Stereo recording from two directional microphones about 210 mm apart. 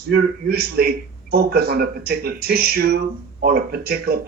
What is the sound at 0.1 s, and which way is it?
A man's voice, 45° right (ahead or behind).